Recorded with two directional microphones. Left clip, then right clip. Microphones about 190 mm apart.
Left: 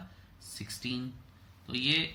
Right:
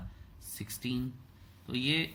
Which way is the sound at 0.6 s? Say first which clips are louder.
Even; 20° right (ahead or behind).